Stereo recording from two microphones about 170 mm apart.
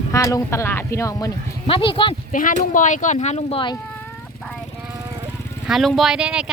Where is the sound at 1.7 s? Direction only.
30° left (ahead or behind).